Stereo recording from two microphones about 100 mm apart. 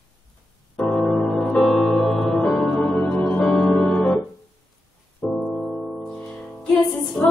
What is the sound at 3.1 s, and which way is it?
Organ, 20° left (ahead or behind).